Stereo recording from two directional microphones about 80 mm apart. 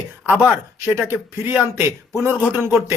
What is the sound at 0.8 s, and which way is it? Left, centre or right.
Speech, right.